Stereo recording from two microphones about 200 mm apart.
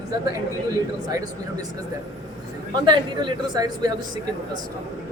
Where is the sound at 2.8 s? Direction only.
20° right (ahead or behind).